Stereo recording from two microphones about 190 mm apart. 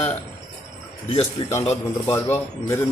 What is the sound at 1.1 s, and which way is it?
Speech, 30° left (ahead or behind).